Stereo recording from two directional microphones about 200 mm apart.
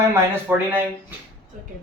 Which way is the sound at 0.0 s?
10° right (ahead or behind).